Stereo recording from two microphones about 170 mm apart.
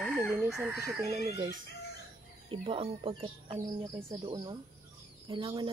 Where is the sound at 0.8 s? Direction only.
20° right (ahead or behind).